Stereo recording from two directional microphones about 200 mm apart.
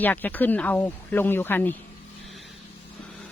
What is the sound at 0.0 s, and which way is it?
Speech, 10° left (ahead or behind).